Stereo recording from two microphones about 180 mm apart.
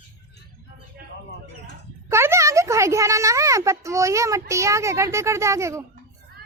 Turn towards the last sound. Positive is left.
turn(degrees=-15)  # may be behind; listen again after turning